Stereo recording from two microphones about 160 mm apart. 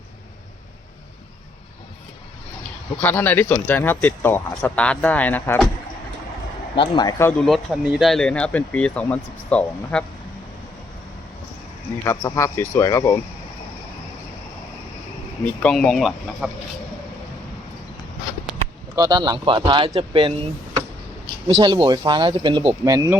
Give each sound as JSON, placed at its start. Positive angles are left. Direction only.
{"t": 3.0, "sound": "speech", "side_deg": 10}
{"t": 6.7, "sound": "speech", "side_deg": 25}
{"t": 7.3, "sound": "speech", "side_deg": 5}
{"t": 12.0, "sound": "speech", "side_deg": 20}
{"t": 15.6, "sound": "speech", "side_deg": 5}
{"t": 18.9, "sound": "speech", "side_deg": -25}
{"t": 21.4, "sound": "speech", "side_deg": -30}
{"t": 22.8, "sound": "speech", "side_deg": -20}